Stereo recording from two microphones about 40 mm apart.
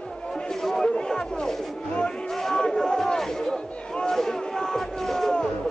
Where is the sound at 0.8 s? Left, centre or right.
Left.